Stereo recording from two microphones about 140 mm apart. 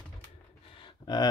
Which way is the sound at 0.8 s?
30° left (ahead or behind).